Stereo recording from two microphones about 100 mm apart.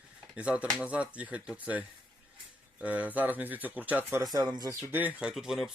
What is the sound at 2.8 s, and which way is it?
Speech, 15° right (ahead or behind).